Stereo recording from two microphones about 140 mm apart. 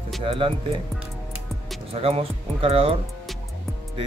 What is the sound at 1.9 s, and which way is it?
Speech, 45° right (ahead or behind).